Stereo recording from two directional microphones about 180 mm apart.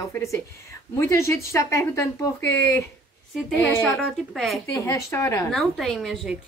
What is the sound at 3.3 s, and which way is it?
A woman's voice, centre (ahead or behind).